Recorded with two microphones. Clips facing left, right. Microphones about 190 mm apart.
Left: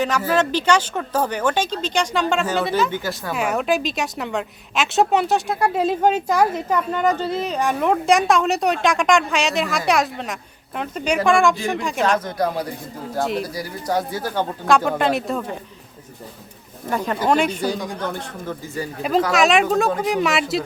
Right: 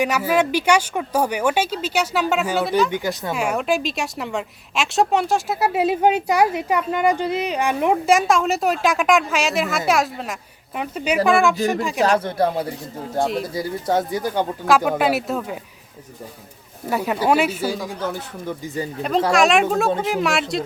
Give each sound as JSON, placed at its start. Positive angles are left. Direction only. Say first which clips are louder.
{"t": 0.0, "sound": "a woman's voice", "louder": "right 1 dB", "side_deg": -10}
{"t": 2.9, "sound": "a woman's voice", "louder": "right 2 dB", "side_deg": -20}
{"t": 3.3, "sound": "a woman's voice", "louder": "left 2 dB", "side_deg": 0}
{"t": 8.0, "sound": "a woman's voice", "louder": "left 2 dB", "side_deg": 0}
{"t": 12.0, "sound": "speech", "louder": "right 2 dB", "side_deg": -30}
{"t": 13.1, "sound": "a woman's voice", "louder": "right 1 dB", "side_deg": 0}
{"t": 13.5, "sound": "a woman's voice", "louder": "right 2 dB", "side_deg": -25}
{"t": 16.9, "sound": "a woman's voice", "louder": "right 1 dB", "side_deg": -10}